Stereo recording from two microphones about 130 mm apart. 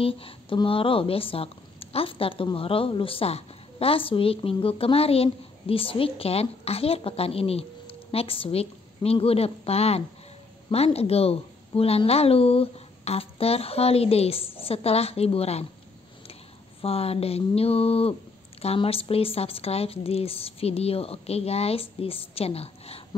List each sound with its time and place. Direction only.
0.0 s a woman's voice: 45° left (ahead or behind)
16.8 s a woman's voice: 50° left (ahead or behind)